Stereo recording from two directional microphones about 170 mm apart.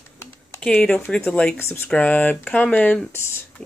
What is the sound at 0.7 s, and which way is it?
Speech, 5° left (ahead or behind).